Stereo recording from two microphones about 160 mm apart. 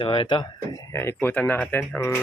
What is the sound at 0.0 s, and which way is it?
Speech, 30° left (ahead or behind).